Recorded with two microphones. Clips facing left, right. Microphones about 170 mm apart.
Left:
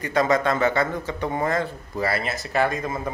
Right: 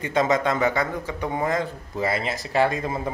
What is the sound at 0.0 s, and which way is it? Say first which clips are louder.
Speech: left 1 dB; 20° right (ahead or behind).